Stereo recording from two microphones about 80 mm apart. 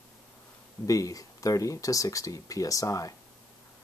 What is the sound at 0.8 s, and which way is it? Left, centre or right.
Speech, left.